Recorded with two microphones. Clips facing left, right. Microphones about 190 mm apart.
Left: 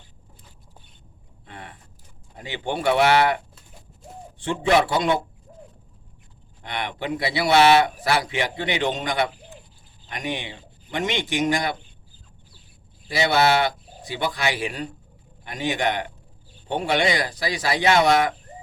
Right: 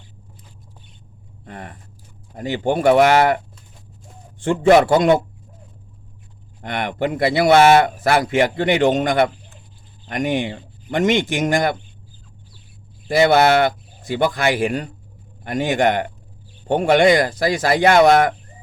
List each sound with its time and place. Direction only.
1.5 s a man's voice: 45° right (ahead or behind)
4.4 s a man's voice: 45° right (ahead or behind)
6.6 s a man's voice: 50° right (ahead or behind)
13.1 s a man's voice: 50° right (ahead or behind)